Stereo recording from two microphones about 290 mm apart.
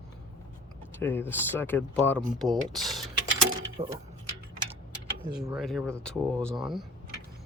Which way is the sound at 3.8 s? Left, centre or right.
Centre.